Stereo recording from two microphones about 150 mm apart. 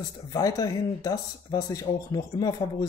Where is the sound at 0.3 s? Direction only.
25° left (ahead or behind).